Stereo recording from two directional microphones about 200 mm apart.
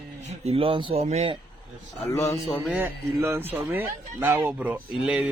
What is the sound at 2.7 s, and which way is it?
Speech, 10° right (ahead or behind).